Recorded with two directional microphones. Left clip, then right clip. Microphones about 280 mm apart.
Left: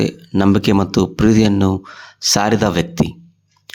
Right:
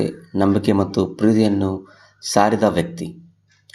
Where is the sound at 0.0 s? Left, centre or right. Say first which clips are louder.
Left 3 dB; left.